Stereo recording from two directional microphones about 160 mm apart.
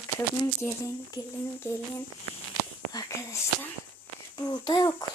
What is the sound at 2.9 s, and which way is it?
Speech, 20° left (ahead or behind).